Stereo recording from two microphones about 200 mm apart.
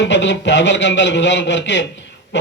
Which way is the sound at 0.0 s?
65° left (ahead or behind).